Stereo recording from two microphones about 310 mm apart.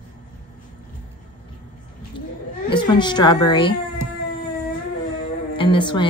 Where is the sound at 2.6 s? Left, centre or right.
Centre.